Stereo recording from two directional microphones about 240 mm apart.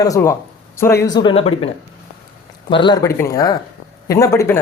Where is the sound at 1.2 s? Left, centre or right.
Left.